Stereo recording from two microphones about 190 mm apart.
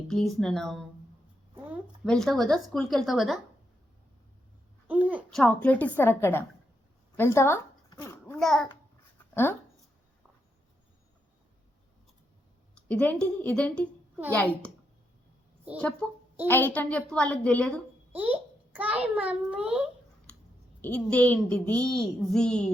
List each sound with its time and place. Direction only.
0.1 s a child's voice: centre (ahead or behind)
2.0 s a child's voice: centre (ahead or behind)
4.9 s a sound: 10° right (ahead or behind)
5.3 s a woman's voice: 5° left (ahead or behind)
7.9 s a sound: 20° left (ahead or behind)
8.4 s a child's voice: centre (ahead or behind)
12.7 s a woman's voice: 5° left (ahead or behind)
15.8 s a child's voice: 5° left (ahead or behind)
18.1 s a child's voice: 10° right (ahead or behind)
20.3 s clicking: 5° left (ahead or behind)
20.8 s a child's voice: 10° left (ahead or behind)